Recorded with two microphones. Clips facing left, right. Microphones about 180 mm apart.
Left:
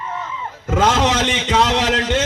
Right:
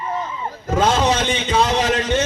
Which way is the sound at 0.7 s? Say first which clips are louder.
Left 1 dB; 90° left.